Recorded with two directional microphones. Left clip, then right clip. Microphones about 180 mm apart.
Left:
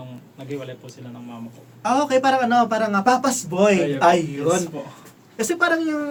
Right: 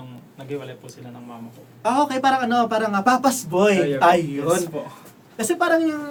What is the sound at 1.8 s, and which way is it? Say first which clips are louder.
Speech: left 1 dB; 15° left (ahead or behind).